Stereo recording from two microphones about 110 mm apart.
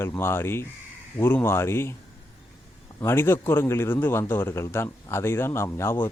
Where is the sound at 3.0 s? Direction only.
20° left (ahead or behind).